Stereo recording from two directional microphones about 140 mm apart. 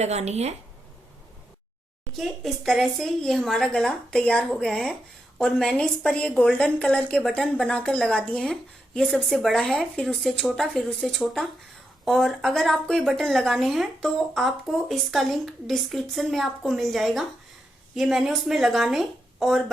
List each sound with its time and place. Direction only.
0.0 s speech: 50° right (ahead or behind)
2.1 s a woman's voice: centre (ahead or behind)